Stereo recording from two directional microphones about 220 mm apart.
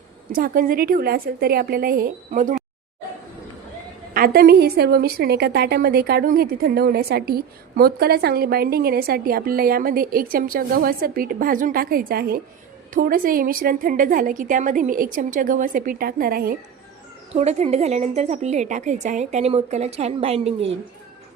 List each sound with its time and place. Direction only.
0.3 s a woman's voice: 40° right (ahead or behind)
4.1 s a woman's voice: 40° right (ahead or behind)
17.3 s a woman's voice: 30° right (ahead or behind)